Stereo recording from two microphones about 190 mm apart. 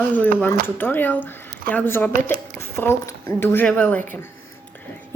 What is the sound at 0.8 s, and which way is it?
A woman's voice, 10° left (ahead or behind).